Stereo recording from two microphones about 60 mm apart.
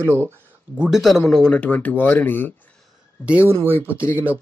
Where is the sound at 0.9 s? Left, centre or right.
Centre.